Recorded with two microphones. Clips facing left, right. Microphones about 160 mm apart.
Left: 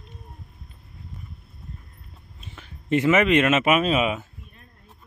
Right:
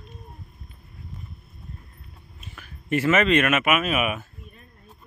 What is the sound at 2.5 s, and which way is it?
Speech, 25° left (ahead or behind).